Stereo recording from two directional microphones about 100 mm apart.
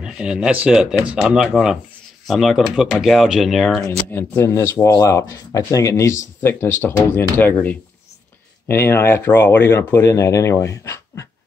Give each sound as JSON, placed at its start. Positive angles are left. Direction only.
{"t": 0.0, "sound": "speech", "side_deg": -5}
{"t": 4.1, "sound": "speech", "side_deg": 20}